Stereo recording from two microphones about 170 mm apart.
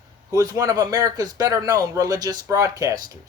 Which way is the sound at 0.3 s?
20° right (ahead or behind).